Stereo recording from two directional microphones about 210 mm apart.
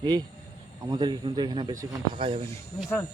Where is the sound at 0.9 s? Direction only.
20° right (ahead or behind).